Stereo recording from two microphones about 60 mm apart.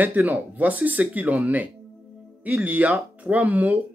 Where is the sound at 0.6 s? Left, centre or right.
Right.